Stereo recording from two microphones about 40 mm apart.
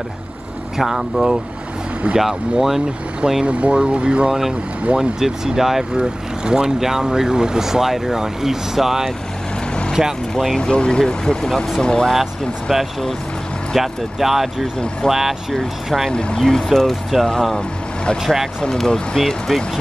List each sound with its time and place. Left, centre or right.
0.7 s speech: centre
3.4 s speech: right
4.3 s speech: centre
5.9 s speech: centre
10.6 s speech: left
12.1 s speech: centre
13.7 s speech: centre
16.1 s speech: left
16.3 s speech: centre
18.2 s speech: centre
18.6 s speech: centre